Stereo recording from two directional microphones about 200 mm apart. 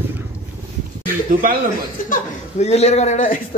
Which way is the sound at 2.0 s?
35° left (ahead or behind).